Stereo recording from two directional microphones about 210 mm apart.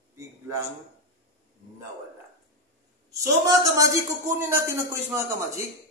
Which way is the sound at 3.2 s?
15° right (ahead or behind).